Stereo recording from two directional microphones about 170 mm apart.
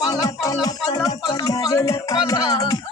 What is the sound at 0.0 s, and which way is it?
Music, 20° left (ahead or behind).